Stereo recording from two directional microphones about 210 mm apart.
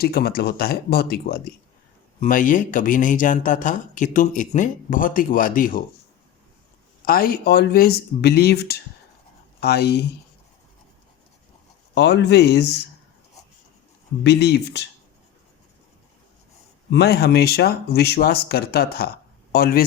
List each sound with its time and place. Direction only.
0.0 s speech: 45° left (ahead or behind)
7.0 s speech: 45° left (ahead or behind)
11.9 s speech: 55° left (ahead or behind)
14.3 s speech: 50° left (ahead or behind)
16.9 s speech: 50° left (ahead or behind)